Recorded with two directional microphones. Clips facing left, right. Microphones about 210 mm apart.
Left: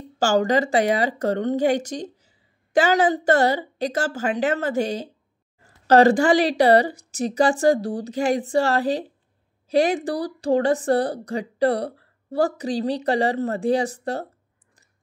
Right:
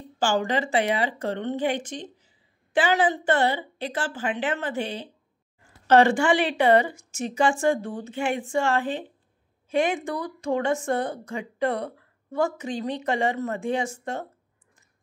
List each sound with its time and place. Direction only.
0.2 s a woman's voice: 40° left (ahead or behind)